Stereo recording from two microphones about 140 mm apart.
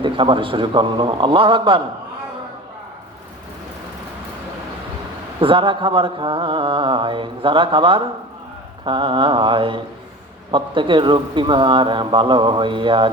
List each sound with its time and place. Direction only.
0.0 s mantra: 35° right (ahead or behind)
5.4 s mantra: 40° right (ahead or behind)